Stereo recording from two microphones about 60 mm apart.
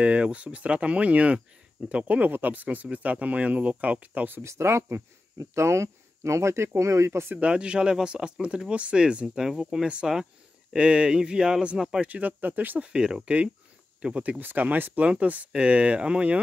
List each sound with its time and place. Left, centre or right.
0.0 s speech: centre
4.4 s speech: right
7.3 s speech: centre
12.0 s speech: right
12.8 s speech: centre
14.4 s speech: right